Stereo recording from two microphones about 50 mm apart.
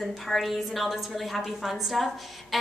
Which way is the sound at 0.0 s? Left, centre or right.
Centre.